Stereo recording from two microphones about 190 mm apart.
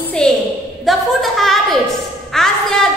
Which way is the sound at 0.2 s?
5° left (ahead or behind).